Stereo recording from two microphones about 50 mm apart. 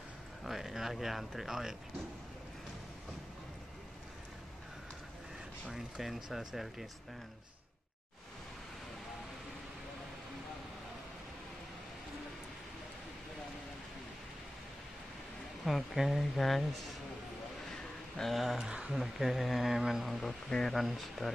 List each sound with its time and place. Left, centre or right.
0.4 s speech: centre
5.7 s speech: centre
15.6 s speech: centre
17.6 s a sound: centre
18.3 s speech: centre
18.6 s speech: centre
18.9 s speech: centre
20.1 s speech: centre
20.7 s speech: centre